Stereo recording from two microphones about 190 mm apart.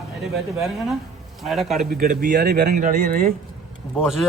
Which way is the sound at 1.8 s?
50° right (ahead or behind).